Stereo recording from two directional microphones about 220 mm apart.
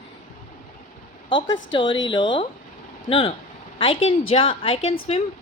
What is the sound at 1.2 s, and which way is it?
A woman's voice, 20° left (ahead or behind).